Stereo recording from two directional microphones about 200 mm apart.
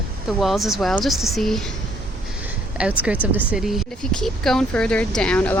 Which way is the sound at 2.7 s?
5° right (ahead or behind).